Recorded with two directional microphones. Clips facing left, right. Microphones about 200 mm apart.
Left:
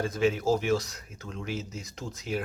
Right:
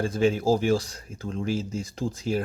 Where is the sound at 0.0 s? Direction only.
30° right (ahead or behind).